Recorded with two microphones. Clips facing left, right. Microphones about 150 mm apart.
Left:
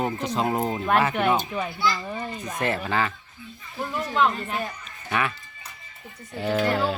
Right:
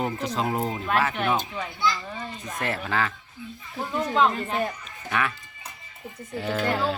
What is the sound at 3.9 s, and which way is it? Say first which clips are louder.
Speech: right 1 dB; 20° right (ahead or behind).